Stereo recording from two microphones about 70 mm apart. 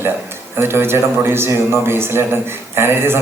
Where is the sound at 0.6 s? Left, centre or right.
Right.